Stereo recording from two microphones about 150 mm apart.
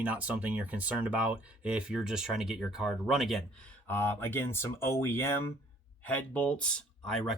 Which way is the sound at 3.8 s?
15° left (ahead or behind).